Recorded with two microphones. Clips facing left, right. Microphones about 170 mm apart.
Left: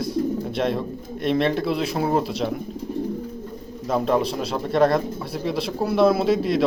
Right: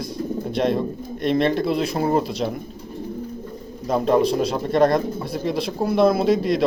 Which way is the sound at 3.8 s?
Centre (ahead or behind).